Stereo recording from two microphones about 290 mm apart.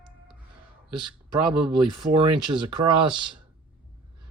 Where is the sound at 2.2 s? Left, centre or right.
Centre.